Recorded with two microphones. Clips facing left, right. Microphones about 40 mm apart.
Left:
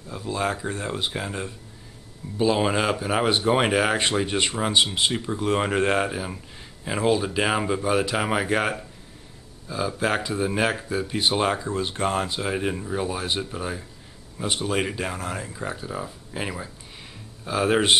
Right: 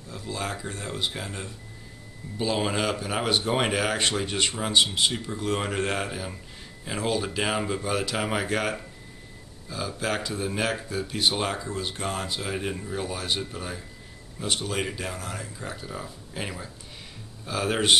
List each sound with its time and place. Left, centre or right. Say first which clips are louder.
0.1 s speech: left 6 dB; centre